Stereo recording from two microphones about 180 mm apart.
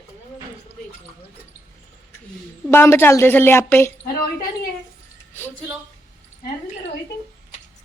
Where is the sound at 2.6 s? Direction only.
15° left (ahead or behind).